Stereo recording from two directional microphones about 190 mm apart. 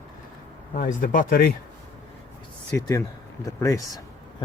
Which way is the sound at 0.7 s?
45° left (ahead or behind).